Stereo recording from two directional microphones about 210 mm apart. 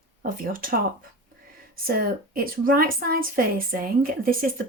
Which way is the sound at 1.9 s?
45° right (ahead or behind).